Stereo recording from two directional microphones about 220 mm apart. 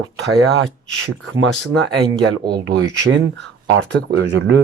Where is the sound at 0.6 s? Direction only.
65° right (ahead or behind).